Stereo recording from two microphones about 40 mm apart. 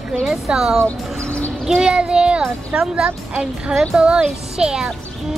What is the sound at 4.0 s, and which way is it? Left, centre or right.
Speech, right.